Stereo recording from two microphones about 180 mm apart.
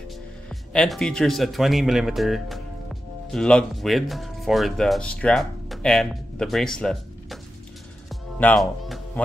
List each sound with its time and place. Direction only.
0.1 s speech: centre (ahead or behind)
8.1 s music: 5° left (ahead or behind)